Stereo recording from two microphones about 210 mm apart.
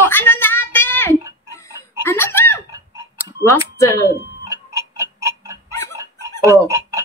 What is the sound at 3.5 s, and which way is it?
Speech, 15° left (ahead or behind).